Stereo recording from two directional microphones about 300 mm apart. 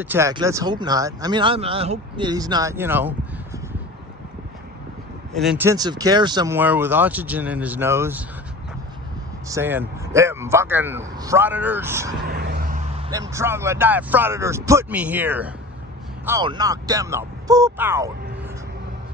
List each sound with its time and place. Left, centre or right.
0.0 s speech: centre
5.3 s speech: centre
9.5 s speech: centre
12.3 s vehicle: right
13.1 s speech: centre